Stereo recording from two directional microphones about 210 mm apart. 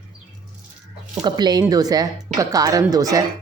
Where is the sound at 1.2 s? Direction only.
20° right (ahead or behind).